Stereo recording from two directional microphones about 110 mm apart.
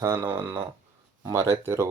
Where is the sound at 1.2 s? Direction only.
30° right (ahead or behind).